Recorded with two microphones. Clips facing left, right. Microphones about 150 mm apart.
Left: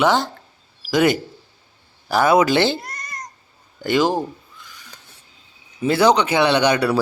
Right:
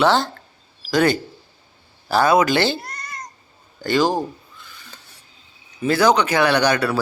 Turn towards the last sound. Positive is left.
turn(degrees=15)  # may be behind; listen again after turning